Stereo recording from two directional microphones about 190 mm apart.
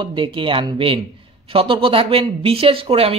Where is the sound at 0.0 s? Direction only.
25° right (ahead or behind).